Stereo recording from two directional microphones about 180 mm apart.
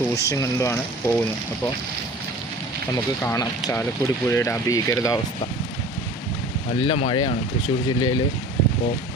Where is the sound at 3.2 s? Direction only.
20° left (ahead or behind).